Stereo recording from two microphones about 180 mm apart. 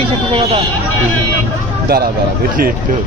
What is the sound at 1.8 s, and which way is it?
Speech, 55° right (ahead or behind).